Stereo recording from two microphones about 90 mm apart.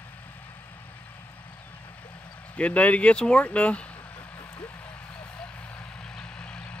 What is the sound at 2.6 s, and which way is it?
Speech, 15° left (ahead or behind).